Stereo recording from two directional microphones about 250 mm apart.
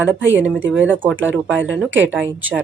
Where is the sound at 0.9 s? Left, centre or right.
Centre.